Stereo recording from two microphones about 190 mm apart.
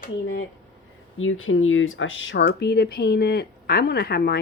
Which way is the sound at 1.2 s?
90° left.